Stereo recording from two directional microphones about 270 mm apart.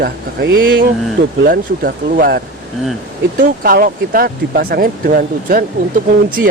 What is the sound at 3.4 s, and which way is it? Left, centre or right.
Speech, right.